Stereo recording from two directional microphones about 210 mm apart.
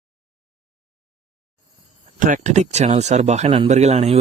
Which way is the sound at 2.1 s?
40° right (ahead or behind).